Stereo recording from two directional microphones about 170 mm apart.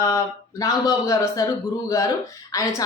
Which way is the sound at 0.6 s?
20° left (ahead or behind).